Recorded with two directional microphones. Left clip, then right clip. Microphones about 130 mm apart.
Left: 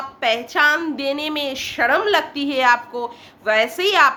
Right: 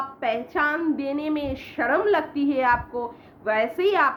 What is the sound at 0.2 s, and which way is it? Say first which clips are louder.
A woman's voice: left 7 dB; 20° left (ahead or behind).